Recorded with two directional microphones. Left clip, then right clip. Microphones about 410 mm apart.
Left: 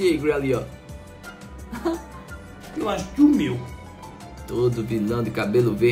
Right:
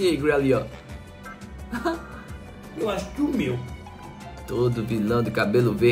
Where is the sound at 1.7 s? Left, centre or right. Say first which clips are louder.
Even; centre.